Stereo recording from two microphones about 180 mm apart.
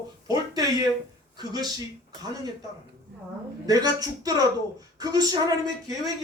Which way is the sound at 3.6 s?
20° right (ahead or behind).